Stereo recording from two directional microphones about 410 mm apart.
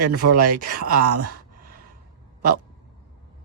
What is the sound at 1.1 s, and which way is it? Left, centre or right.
Speech, right.